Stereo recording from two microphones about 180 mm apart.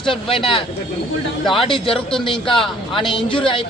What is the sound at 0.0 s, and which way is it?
Speech, 30° left (ahead or behind).